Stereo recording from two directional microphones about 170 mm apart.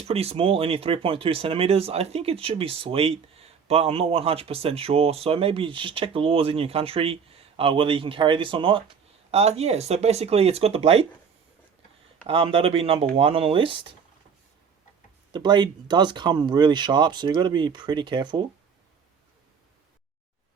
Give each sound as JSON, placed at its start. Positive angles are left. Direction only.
{"t": 0.0, "sound": "speech", "side_deg": -35}
{"t": 12.2, "sound": "speech", "side_deg": -35}
{"t": 15.3, "sound": "speech", "side_deg": -25}